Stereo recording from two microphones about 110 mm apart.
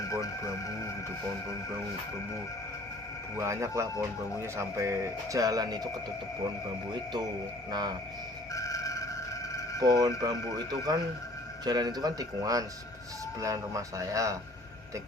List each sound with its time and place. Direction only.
0.1 s music: 30° left (ahead or behind)
3.3 s speech: 25° right (ahead or behind)
7.7 s speech: 40° right (ahead or behind)
8.5 s a sound: 30° left (ahead or behind)
10.2 s speech: 35° right (ahead or behind)